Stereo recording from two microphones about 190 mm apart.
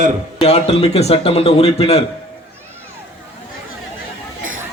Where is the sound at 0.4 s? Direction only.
30° left (ahead or behind).